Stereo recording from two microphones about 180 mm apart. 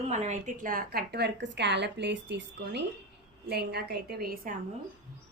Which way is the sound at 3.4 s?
65° right (ahead or behind).